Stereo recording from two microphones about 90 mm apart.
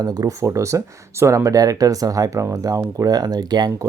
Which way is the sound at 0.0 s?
45° right (ahead or behind).